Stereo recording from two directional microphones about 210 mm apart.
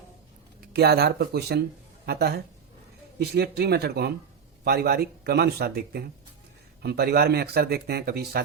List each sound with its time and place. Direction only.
0.7 s speech: 50° right (ahead or behind)